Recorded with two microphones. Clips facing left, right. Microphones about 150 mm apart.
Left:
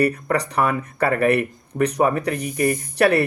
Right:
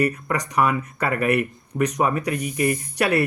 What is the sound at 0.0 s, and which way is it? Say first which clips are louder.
Speech: left 3 dB; 35° left (ahead or behind).